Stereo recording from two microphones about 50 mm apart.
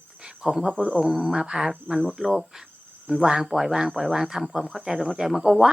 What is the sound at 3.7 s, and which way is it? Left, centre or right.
Speech, centre.